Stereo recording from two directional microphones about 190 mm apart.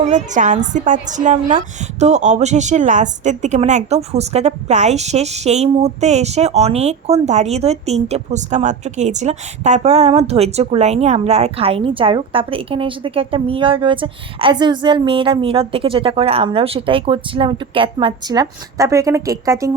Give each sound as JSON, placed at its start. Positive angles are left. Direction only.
{"t": 0.0, "sound": "a woman's voice", "side_deg": -40}